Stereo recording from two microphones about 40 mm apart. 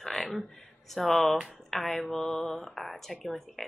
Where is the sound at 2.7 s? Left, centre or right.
Centre.